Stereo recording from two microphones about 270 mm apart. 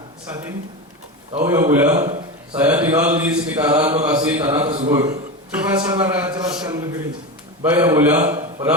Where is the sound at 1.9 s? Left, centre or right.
Right.